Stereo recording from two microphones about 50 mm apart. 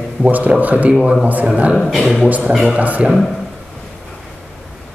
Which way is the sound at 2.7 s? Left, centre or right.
Right.